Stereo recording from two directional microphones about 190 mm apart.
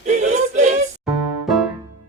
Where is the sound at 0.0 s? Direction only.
40° right (ahead or behind).